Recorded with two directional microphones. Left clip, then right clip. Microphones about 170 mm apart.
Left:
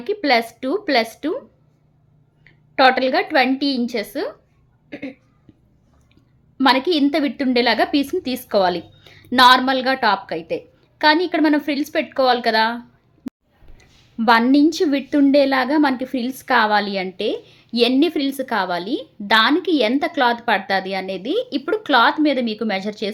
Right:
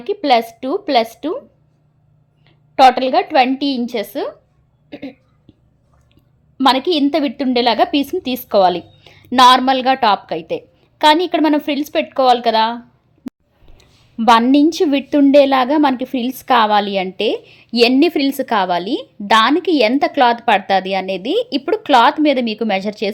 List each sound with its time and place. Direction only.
0.0 s a woman's voice: 20° right (ahead or behind)
2.4 s a woman's voice: 20° right (ahead or behind)
6.6 s a woman's voice: 20° right (ahead or behind)
13.2 s a sound: centre (ahead or behind)
13.7 s a woman's voice: 25° right (ahead or behind)